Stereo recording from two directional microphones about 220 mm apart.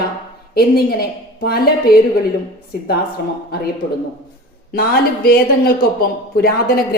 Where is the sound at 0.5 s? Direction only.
45° left (ahead or behind).